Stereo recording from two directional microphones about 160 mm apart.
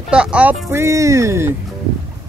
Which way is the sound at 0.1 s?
5° right (ahead or behind).